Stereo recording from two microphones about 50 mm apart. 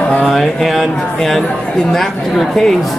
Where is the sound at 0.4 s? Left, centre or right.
Centre.